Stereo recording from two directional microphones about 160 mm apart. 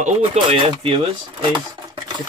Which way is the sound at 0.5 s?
35° right (ahead or behind).